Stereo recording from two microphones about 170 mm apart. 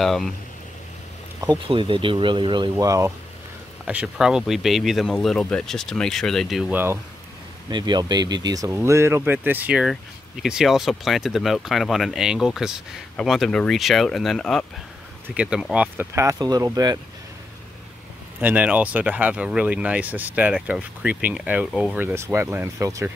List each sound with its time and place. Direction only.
0.0 s speech: centre (ahead or behind)
1.4 s speech: 25° right (ahead or behind)
3.8 s speech: 5° right (ahead or behind)
7.7 s speech: 25° right (ahead or behind)
18.4 s speech: 10° right (ahead or behind)